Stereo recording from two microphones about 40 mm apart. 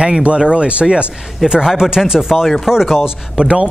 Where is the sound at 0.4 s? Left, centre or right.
Right.